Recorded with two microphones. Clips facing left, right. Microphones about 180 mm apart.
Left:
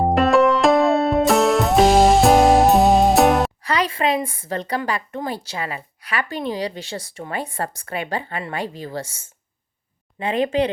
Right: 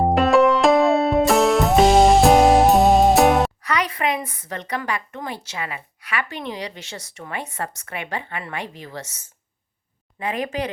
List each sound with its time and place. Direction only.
0.0 s music: centre (ahead or behind)
3.6 s speech: 30° left (ahead or behind)